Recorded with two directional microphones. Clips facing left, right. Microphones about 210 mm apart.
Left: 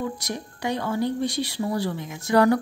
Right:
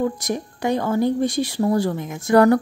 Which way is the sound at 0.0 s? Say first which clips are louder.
Right 7 dB; 45° right (ahead or behind).